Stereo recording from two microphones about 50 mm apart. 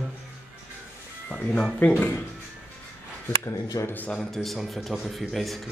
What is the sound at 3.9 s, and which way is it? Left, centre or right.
Speech, left.